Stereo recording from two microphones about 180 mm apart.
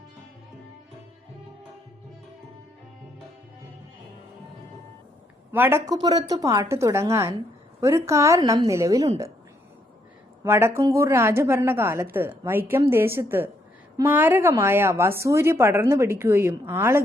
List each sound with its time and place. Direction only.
5.5 s a woman's voice: 15° right (ahead or behind)
10.4 s a woman's voice: 15° right (ahead or behind)